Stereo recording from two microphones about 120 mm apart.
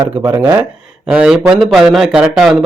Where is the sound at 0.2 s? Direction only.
35° right (ahead or behind).